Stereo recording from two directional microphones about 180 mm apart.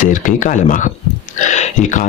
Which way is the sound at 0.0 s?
45° left (ahead or behind).